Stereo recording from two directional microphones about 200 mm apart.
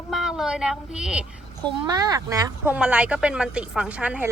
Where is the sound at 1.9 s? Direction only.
15° right (ahead or behind).